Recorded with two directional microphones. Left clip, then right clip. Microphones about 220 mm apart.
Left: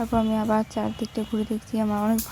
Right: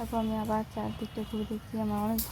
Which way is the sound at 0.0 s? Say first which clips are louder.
Left 8 dB; 40° left (ahead or behind).